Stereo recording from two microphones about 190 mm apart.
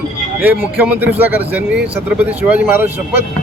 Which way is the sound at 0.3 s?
10° right (ahead or behind).